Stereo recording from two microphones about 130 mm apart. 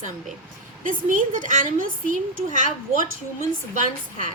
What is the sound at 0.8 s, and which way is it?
A woman's voice, 90° right.